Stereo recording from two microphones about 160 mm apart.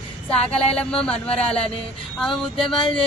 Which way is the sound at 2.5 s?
30° left (ahead or behind).